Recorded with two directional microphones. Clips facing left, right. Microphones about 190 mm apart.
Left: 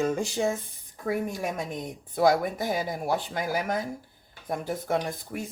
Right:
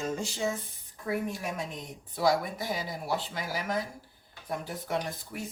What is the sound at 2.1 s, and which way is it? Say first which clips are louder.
A woman's voice: left 5 dB; 50° left (ahead or behind).